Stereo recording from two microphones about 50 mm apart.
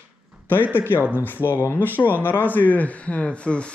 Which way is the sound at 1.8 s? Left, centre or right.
Left.